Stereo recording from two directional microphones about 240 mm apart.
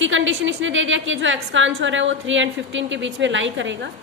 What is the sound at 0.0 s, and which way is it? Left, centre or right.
A woman's voice, right.